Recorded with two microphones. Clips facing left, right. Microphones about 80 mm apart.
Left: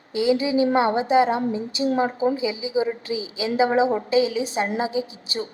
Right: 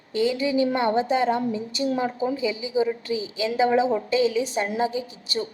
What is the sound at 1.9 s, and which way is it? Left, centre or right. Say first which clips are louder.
Speech: left 4 dB; left.